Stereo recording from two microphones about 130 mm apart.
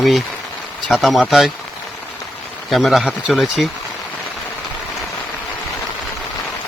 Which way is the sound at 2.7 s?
Centre (ahead or behind).